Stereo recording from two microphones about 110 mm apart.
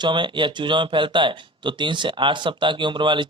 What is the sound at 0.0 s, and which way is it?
A man's voice, 45° right (ahead or behind).